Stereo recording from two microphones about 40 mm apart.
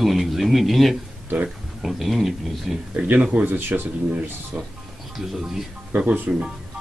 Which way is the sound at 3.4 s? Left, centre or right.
Right.